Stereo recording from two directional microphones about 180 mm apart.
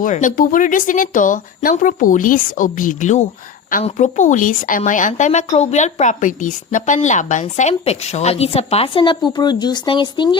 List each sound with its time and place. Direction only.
0.0 s a woman's voice: 45° left (ahead or behind); by 10.2 s 25° left (ahead or behind)